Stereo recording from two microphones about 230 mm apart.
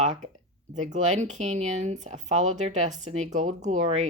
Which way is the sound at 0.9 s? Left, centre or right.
Right.